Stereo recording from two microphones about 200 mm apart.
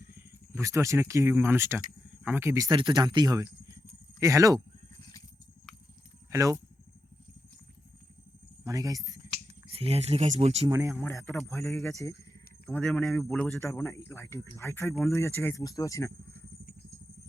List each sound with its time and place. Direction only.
0.0 s speech: 10° right (ahead or behind)
6.3 s speech: 15° right (ahead or behind)
8.6 s speech: 15° right (ahead or behind)
9.6 s speech: 30° right (ahead or behind)
10.7 s speech: 15° right (ahead or behind)
11.0 s speech: 15° left (ahead or behind)
11.6 s speech: centre (ahead or behind)